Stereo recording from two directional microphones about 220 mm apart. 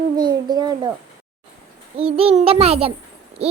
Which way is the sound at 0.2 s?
20° right (ahead or behind).